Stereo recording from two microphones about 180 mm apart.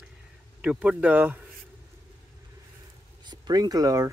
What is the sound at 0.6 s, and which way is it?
Speech, 5° right (ahead or behind).